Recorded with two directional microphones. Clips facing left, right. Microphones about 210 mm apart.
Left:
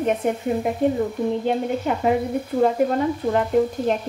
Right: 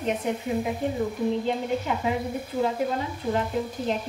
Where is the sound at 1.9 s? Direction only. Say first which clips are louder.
Left 5 dB; 55° left (ahead or behind).